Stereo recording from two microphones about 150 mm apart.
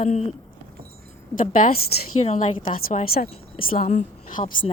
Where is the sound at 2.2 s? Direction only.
45° left (ahead or behind).